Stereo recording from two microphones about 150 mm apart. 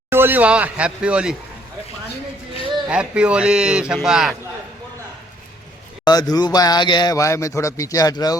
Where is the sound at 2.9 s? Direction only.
10° right (ahead or behind).